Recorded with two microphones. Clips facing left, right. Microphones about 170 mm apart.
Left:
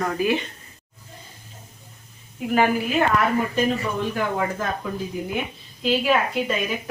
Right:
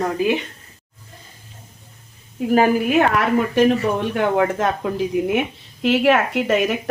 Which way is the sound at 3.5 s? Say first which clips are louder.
Right 7 dB; 70° right (ahead or behind).